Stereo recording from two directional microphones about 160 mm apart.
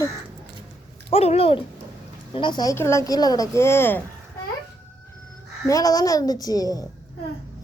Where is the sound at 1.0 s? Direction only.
40° left (ahead or behind); by 4.0 s 15° left (ahead or behind).